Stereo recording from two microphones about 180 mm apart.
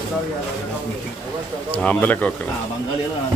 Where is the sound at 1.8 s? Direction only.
10° left (ahead or behind).